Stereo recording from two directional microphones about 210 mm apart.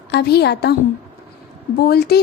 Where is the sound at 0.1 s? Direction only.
50° left (ahead or behind).